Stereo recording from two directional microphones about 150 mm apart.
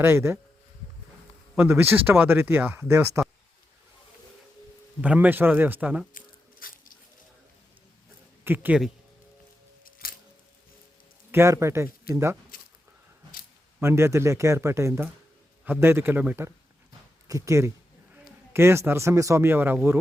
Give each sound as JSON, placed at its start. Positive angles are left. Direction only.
{"t": 0.0, "sound": "speech", "side_deg": -15}
{"t": 1.5, "sound": "speech", "side_deg": -15}
{"t": 4.9, "sound": "speech", "side_deg": -10}
{"t": 6.1, "sound": "biting", "side_deg": 70}
{"t": 8.4, "sound": "speech", "side_deg": -10}
{"t": 10.0, "sound": "music", "side_deg": 80}
{"t": 11.3, "sound": "speech", "side_deg": -20}
{"t": 13.7, "sound": "speech", "side_deg": -15}